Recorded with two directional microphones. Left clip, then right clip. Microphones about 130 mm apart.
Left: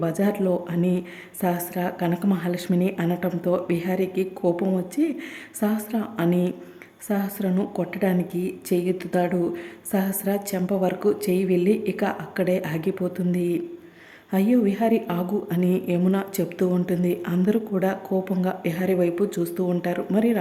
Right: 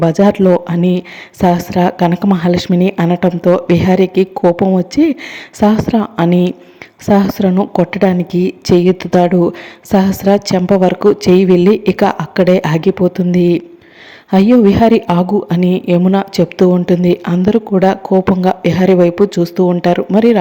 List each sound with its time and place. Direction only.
0.0 s a woman's voice: 40° right (ahead or behind)